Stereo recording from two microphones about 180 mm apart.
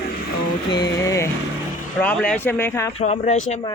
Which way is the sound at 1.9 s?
5° left (ahead or behind).